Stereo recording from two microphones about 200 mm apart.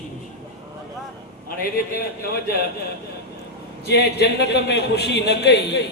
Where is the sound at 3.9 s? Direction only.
55° left (ahead or behind).